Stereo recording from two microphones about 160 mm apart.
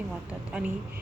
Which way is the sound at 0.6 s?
5° right (ahead or behind).